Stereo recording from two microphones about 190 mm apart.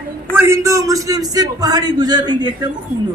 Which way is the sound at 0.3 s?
15° right (ahead or behind).